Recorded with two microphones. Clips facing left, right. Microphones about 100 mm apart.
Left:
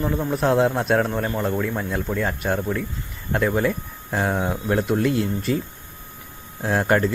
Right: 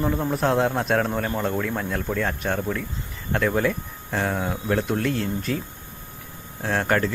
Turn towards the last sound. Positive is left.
turn(degrees=10)  # may be behind; listen again after turning